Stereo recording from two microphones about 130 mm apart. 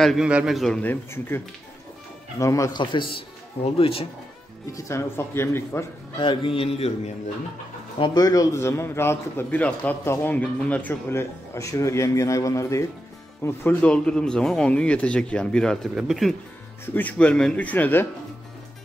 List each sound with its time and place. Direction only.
0.0 s a man's voice: 5° right (ahead or behind)
2.3 s a man's voice: 25° left (ahead or behind)
2.8 s speech: 40° left (ahead or behind)
4.7 s a man's voice: 20° left (ahead or behind)
6.1 s speech: 40° left (ahead or behind)
8.0 s a man's voice: 30° left (ahead or behind); by 16.3 s centre (ahead or behind)
16.8 s speech: 15° left (ahead or behind)